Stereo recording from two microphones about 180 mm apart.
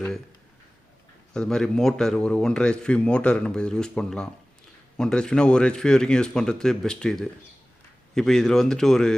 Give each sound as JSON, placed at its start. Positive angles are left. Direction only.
{"t": 1.3, "sound": "speech", "side_deg": 5}